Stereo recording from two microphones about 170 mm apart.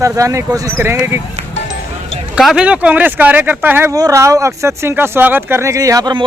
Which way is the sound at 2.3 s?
5° right (ahead or behind).